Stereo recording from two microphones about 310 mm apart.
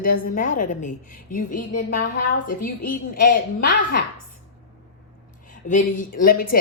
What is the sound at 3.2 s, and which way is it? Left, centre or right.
Speech, left.